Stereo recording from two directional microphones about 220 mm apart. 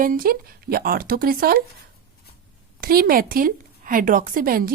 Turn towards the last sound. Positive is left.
turn(degrees=-40)  # may be behind; listen again after turning